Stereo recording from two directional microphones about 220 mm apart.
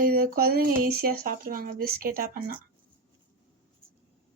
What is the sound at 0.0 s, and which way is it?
Speech, 40° right (ahead or behind).